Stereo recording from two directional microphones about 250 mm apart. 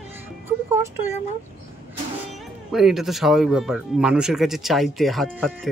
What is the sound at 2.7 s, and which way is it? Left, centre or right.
Speech, centre.